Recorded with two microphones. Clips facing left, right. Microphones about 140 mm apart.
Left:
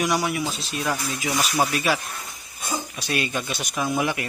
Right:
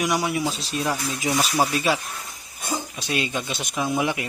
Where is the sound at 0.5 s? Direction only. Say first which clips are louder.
Right 1 dB; 35° right (ahead or behind).